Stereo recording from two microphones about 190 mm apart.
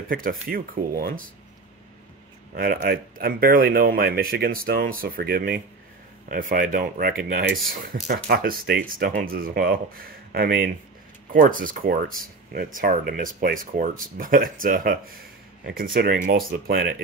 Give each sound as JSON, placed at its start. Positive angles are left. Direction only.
{"t": 0.1, "sound": "speech", "side_deg": -50}
{"t": 2.5, "sound": "speech", "side_deg": -50}